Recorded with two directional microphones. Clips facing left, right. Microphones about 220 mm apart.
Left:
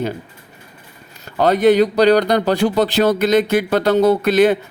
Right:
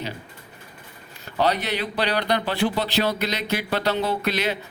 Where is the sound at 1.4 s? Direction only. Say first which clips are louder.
Left 11 dB; 50° left (ahead or behind).